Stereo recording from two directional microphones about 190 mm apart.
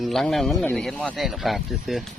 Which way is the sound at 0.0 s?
Centre (ahead or behind).